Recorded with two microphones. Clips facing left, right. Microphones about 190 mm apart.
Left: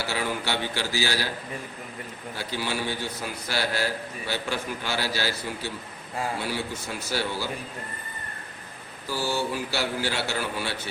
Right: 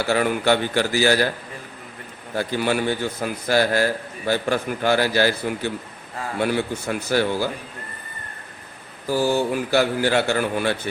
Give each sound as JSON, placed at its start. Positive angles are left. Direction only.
{"t": 0.0, "sound": "a man's voice", "side_deg": -55}
{"t": 2.3, "sound": "a man's voice", "side_deg": -50}
{"t": 9.0, "sound": "a man's voice", "side_deg": -45}